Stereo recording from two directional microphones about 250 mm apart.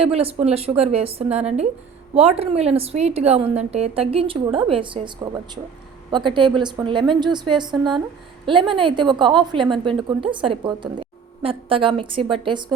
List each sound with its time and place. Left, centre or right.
0.0 s a woman's voice: right